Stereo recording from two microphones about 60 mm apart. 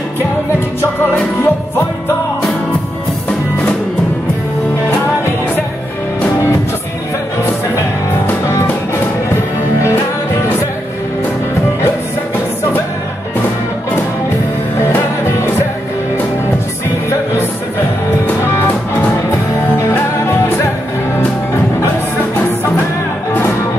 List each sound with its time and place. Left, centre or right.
1.4 s music: left
18.4 s music: left
18.7 s music: left
19.1 s music: left